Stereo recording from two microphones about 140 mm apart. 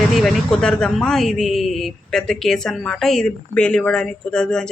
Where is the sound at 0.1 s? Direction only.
Centre (ahead or behind).